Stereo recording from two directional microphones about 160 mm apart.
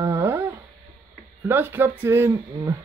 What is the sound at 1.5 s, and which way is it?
Speech, 15° right (ahead or behind).